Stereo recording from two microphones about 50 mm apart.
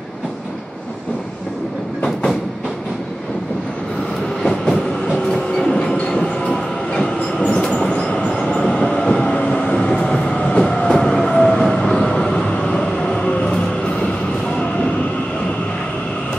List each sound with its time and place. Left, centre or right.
4.4 s train: centre
12.0 s vehicle: centre